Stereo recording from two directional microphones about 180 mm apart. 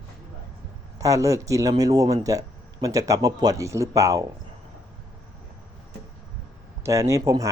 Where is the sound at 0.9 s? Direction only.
20° right (ahead or behind).